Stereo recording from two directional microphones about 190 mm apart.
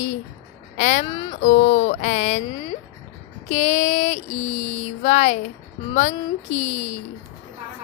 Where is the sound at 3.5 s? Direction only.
35° left (ahead or behind).